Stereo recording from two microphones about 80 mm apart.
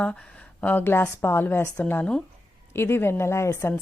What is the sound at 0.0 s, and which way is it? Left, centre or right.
A woman's voice, centre.